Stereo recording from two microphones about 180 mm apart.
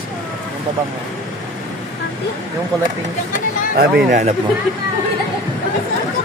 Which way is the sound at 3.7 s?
55° right (ahead or behind).